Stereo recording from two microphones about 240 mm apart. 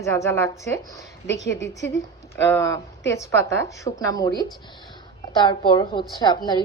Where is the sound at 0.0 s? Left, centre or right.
Centre.